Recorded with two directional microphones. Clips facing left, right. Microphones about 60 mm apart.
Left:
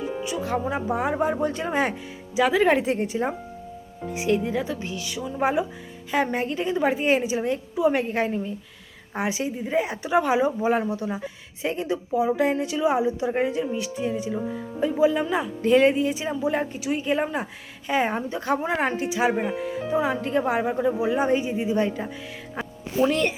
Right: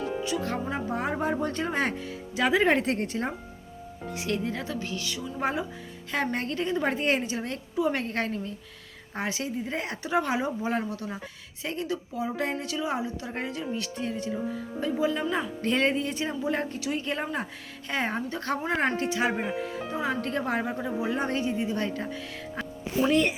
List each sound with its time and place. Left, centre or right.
0.0 s a woman's voice: centre
19.7 s a woman's voice: centre
22.6 s music: centre
23.0 s a woman's voice: centre